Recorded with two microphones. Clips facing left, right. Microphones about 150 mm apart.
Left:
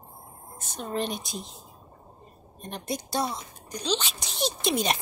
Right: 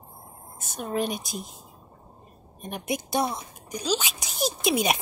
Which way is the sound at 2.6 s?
10° right (ahead or behind).